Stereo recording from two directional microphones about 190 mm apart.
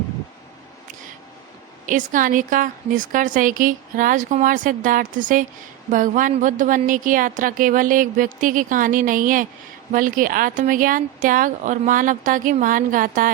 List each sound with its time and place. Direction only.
1.9 s a woman's voice: 45° right (ahead or behind)